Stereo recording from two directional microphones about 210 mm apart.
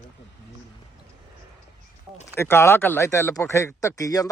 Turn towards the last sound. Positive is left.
turn(degrees=15)  # may be behind; listen again after turning